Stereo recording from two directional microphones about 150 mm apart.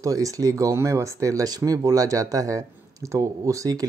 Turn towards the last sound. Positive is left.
turn(degrees=-20)  # may be behind; listen again after turning